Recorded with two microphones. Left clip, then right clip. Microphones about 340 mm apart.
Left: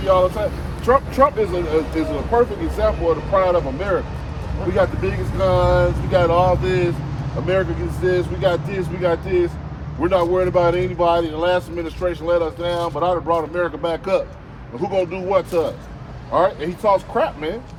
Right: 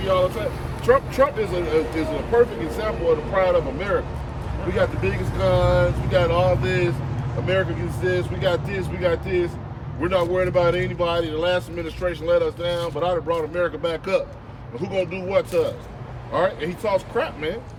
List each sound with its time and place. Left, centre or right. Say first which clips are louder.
0.0 s speech: left 4 dB; centre
8.0 s speech: left 4 dB; centre